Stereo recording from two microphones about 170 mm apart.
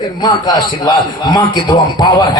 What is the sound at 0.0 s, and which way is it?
A man's voice, 25° left (ahead or behind).